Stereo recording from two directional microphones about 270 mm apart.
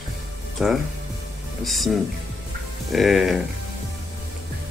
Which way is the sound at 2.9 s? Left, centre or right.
Centre.